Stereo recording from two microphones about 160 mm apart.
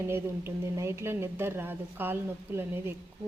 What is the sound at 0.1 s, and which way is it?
A woman's voice, 15° right (ahead or behind).